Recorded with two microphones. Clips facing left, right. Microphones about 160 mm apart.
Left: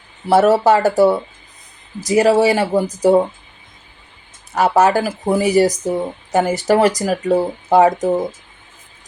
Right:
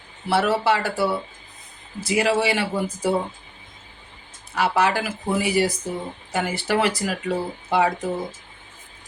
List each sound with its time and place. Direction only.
0.3 s speech: 45° left (ahead or behind)
4.5 s speech: 45° left (ahead or behind)